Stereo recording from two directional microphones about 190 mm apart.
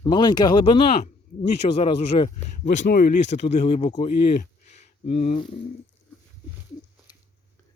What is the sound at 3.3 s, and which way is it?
Speech, 35° left (ahead or behind).